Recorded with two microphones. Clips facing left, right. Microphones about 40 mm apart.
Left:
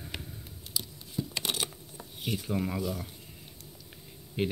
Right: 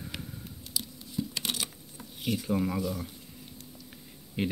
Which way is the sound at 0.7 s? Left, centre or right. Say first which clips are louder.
Right 1 dB; left.